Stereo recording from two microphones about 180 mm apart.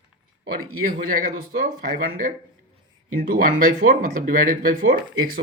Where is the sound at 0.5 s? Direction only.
55° right (ahead or behind).